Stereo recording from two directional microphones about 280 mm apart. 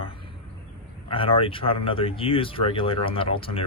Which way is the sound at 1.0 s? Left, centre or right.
Centre.